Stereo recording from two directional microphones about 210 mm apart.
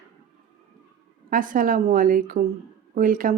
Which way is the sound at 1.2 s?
40° right (ahead or behind).